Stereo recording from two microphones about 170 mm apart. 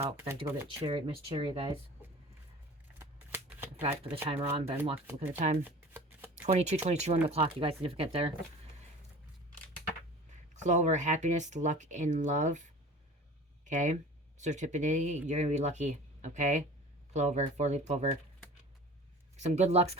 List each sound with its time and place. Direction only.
0.0 s speech: 15° right (ahead or behind)
0.8 s speech: 30° right (ahead or behind)
3.0 s shuffling cards: 10° right (ahead or behind)
3.8 s speech: 35° right (ahead or behind)
5.6 s shuffling cards: 10° right (ahead or behind)
6.4 s speech: 40° right (ahead or behind)
10.5 s speech: 45° right (ahead or behind)
13.7 s speech: 45° right (ahead or behind)
19.4 s speech: 40° right (ahead or behind)